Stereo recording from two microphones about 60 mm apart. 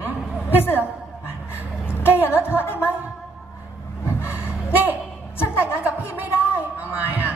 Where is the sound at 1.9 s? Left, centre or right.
Left.